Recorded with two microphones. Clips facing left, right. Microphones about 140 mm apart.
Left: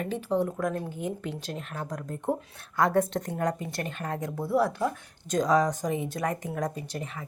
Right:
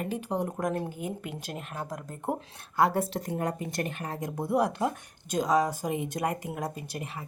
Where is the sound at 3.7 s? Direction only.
15° right (ahead or behind).